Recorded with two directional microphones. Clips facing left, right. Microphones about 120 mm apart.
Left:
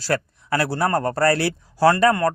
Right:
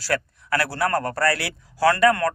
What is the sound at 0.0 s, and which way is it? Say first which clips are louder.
Speech: left 2 dB; 25° left (ahead or behind).